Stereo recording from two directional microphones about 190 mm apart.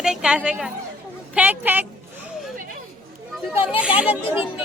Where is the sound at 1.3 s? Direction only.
10° right (ahead or behind).